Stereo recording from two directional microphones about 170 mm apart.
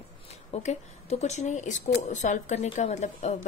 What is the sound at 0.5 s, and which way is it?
Speech, 40° left (ahead or behind).